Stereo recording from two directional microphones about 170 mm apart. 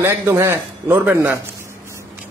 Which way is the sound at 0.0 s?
15° right (ahead or behind).